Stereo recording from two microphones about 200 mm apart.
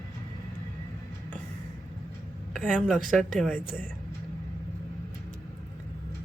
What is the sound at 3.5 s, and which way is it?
Speech, 40° right (ahead or behind).